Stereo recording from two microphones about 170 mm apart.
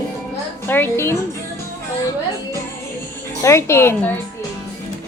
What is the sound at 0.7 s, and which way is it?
Speech, 15° left (ahead or behind).